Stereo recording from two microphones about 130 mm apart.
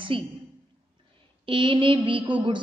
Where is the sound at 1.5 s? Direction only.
40° right (ahead or behind).